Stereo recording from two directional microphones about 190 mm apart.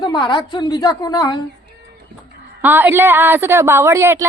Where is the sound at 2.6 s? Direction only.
10° right (ahead or behind).